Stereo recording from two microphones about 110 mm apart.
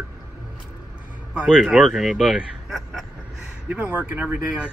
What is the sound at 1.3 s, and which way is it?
Speech, 10° right (ahead or behind).